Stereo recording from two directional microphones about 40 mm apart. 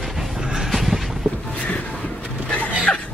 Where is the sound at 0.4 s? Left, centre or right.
Centre.